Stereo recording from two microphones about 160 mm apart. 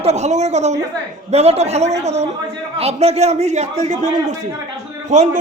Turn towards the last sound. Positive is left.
turn(degrees=-45)  # may be behind; listen again after turning